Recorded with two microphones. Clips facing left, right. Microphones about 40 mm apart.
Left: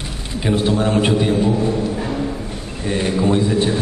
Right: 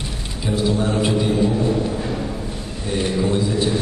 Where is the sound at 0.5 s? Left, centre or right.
Left.